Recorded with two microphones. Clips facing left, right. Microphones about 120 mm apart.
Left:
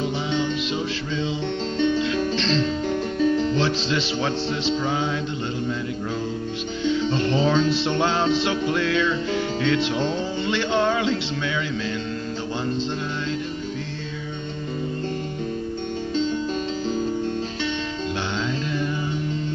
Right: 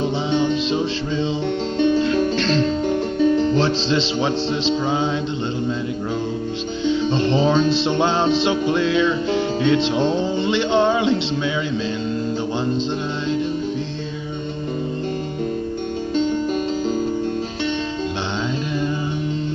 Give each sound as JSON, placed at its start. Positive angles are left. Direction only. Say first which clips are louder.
{"t": 0.0, "sound": "music", "louder": "right 5 dB", "side_deg": -30}
{"t": 1.8, "sound": "music", "louder": "right 5 dB", "side_deg": -40}
{"t": 3.5, "sound": "music", "louder": "right 4 dB", "side_deg": -30}
{"t": 6.9, "sound": "music", "louder": "right 3 dB", "side_deg": -25}